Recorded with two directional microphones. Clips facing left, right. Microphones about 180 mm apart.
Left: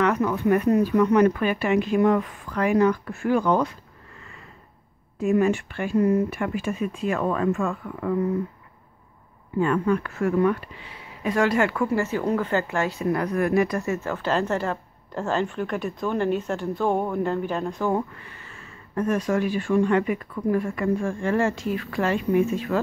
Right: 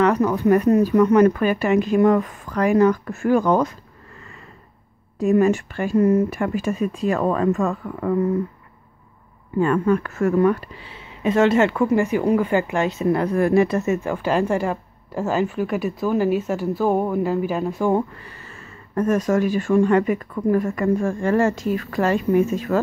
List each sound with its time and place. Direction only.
0.0 s speech: 35° right (ahead or behind)
5.2 s speech: 40° right (ahead or behind)
9.6 s speech: 45° right (ahead or behind); by 17.9 s 10° right (ahead or behind)
17.9 s speech: 35° right (ahead or behind)